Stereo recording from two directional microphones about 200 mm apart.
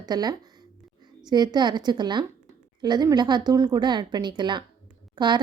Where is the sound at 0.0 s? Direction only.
20° right (ahead or behind).